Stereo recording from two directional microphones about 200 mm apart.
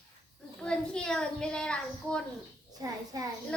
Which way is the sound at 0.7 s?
5° left (ahead or behind).